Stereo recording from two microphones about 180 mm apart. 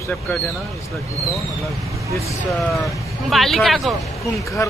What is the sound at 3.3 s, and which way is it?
Speech, centre (ahead or behind).